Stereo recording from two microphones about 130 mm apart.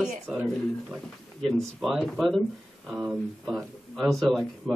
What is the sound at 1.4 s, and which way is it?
Speech, 5° left (ahead or behind).